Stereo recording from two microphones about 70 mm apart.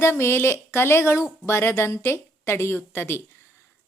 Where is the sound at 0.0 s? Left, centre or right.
Left.